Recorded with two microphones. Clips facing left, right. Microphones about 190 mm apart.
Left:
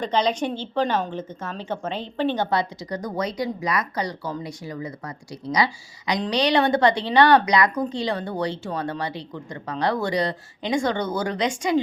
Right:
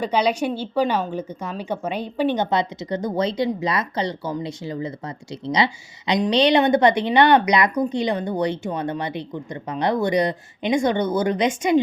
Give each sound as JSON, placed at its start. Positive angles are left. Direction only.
{"t": 0.0, "sound": "speech", "side_deg": -10}